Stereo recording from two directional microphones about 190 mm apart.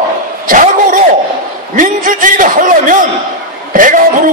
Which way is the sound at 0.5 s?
45° right (ahead or behind).